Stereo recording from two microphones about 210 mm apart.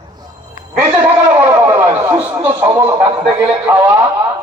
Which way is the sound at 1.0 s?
10° right (ahead or behind).